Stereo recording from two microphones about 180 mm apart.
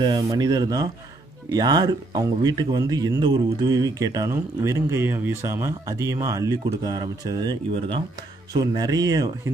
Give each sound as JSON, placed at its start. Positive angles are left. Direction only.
{"t": 0.0, "sound": "speech", "side_deg": -25}